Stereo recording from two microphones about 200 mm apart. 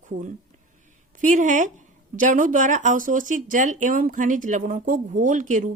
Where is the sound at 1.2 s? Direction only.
40° right (ahead or behind).